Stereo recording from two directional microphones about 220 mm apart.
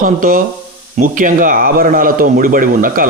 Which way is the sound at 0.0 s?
40° right (ahead or behind).